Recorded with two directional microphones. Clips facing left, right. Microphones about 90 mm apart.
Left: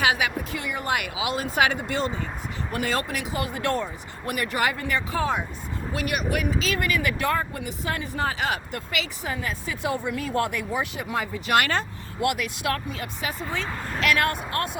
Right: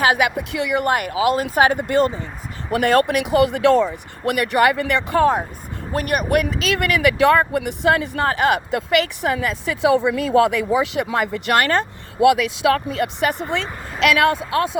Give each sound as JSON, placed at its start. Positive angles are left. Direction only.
{"t": 0.5, "sound": "speech", "side_deg": -90}
{"t": 0.9, "sound": "speech", "side_deg": -45}
{"t": 2.6, "sound": "speech", "side_deg": -75}
{"t": 5.2, "sound": "speech", "side_deg": -45}
{"t": 6.4, "sound": "speech", "side_deg": -70}
{"t": 11.5, "sound": "speech", "side_deg": -45}
{"t": 12.4, "sound": "speech", "side_deg": -90}
{"t": 14.0, "sound": "speech", "side_deg": -90}